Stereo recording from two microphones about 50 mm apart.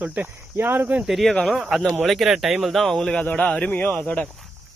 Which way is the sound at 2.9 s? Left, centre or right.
Centre.